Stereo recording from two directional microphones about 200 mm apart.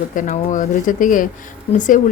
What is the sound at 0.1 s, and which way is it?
Speech, 40° left (ahead or behind).